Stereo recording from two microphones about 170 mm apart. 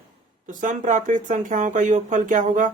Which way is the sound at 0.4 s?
45° right (ahead or behind).